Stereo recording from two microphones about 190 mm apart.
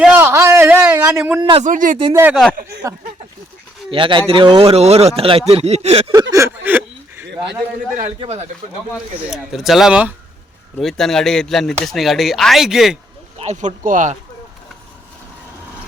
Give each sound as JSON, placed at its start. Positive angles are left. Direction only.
{"t": 0.0, "sound": "a sound", "side_deg": -10}
{"t": 1.1, "sound": "a man's voice", "side_deg": -5}
{"t": 1.4, "sound": "a man's voice", "side_deg": -25}
{"t": 1.6, "sound": "speech", "side_deg": -45}
{"t": 2.3, "sound": "speech", "side_deg": 0}
{"t": 2.9, "sound": "a man's voice", "side_deg": -15}
{"t": 6.3, "sound": "a sound", "side_deg": -10}
{"t": 8.2, "sound": "speech", "side_deg": -35}
{"t": 9.2, "sound": "speech", "side_deg": 0}
{"t": 13.4, "sound": "speech", "side_deg": -40}